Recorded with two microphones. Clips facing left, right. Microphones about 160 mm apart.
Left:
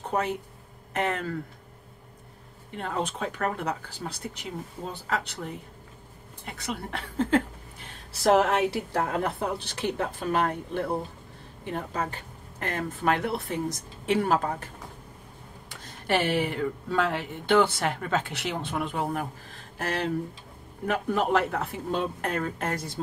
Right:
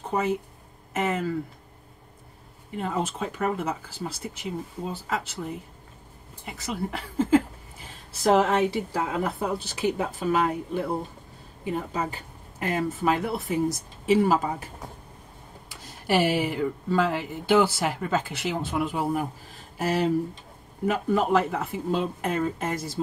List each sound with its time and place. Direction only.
0.1 s speech: centre (ahead or behind)
2.7 s speech: 5° right (ahead or behind)
6.4 s speech: centre (ahead or behind)
15.7 s speech: 5° right (ahead or behind)